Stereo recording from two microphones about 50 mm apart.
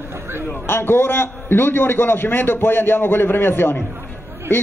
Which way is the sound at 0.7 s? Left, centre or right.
Left.